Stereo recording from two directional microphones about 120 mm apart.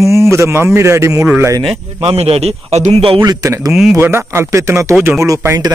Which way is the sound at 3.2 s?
30° right (ahead or behind).